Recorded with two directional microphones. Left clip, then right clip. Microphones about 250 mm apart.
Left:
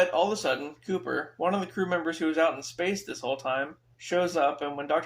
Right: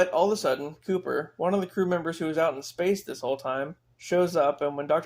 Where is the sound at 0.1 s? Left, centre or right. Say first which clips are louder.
Right 2 dB; right.